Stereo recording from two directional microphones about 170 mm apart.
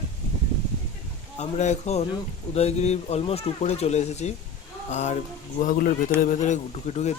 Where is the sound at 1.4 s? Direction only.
40° left (ahead or behind).